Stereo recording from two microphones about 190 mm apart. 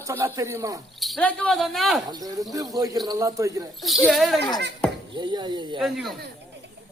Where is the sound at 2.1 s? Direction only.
20° right (ahead or behind).